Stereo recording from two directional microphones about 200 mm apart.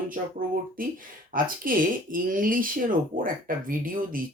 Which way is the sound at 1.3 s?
45° right (ahead or behind).